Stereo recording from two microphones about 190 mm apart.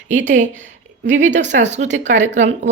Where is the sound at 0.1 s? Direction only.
40° right (ahead or behind).